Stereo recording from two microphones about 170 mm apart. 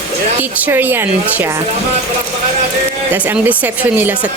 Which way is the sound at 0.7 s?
10° right (ahead or behind).